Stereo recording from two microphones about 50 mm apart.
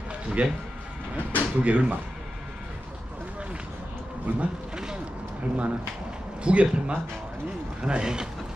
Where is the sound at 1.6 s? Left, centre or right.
Right.